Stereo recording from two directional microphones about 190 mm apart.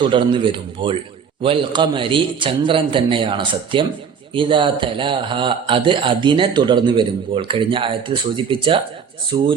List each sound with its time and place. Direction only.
0.0 s speech: 25° right (ahead or behind)